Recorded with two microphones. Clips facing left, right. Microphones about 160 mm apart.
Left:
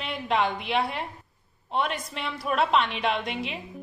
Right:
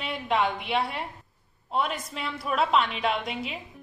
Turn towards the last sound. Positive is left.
turn(degrees=0)  # may be behind; listen again after turning